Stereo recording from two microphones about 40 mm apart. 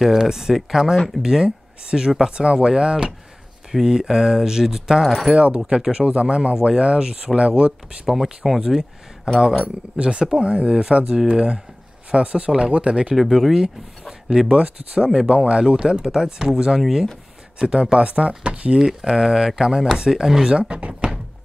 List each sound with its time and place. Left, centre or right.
0.0 s speech: centre
1.2 s speech: centre
5.3 s speech: right
6.0 s speech: right
8.5 s speech: centre
9.9 s speech: right
13.1 s speech: centre
14.5 s speech: right
15.6 s speech: centre
17.6 s speech: centre
18.0 s speech: right
18.8 s speech: centre
20.5 s speech: right